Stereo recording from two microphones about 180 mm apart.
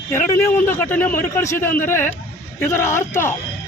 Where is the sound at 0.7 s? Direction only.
10° left (ahead or behind).